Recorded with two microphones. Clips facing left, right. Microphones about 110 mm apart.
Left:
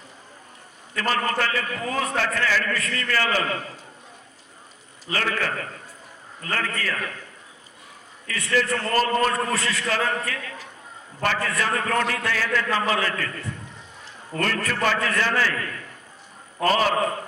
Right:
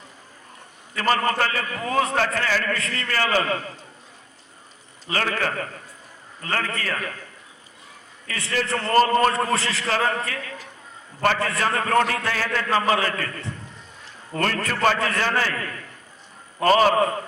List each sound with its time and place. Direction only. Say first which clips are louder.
0.9 s a man's voice: right 3 dB; 40° right (ahead or behind)
2.7 s a man's voice: left 1 dB; 30° right (ahead or behind)
5.1 s a man's voice: right 1 dB; 40° right (ahead or behind)
8.4 s a man's voice: left 2 dB; 30° right (ahead or behind)